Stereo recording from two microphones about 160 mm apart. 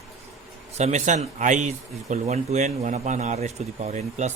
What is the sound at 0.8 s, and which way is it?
Speech, 45° right (ahead or behind).